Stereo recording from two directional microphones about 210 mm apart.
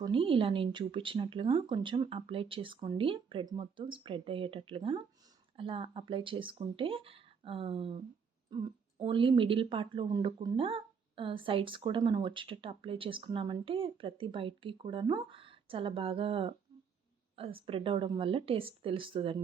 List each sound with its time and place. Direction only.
0.0 s speech: 25° right (ahead or behind)